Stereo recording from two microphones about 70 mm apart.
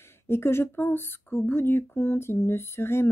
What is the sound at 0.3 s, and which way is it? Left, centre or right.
Speech, left.